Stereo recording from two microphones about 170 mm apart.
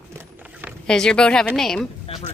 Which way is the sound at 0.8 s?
5° left (ahead or behind).